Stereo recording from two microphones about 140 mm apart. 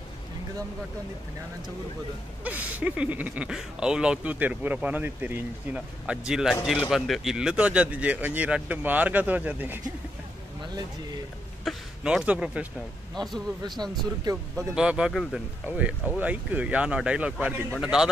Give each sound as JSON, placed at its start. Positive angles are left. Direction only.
{"t": 2.4, "sound": "speech", "side_deg": -10}
{"t": 11.6, "sound": "a man's voice", "side_deg": -5}
{"t": 13.1, "sound": "speech", "side_deg": 0}
{"t": 13.8, "sound": "speech", "side_deg": -30}
{"t": 14.8, "sound": "speech", "side_deg": -5}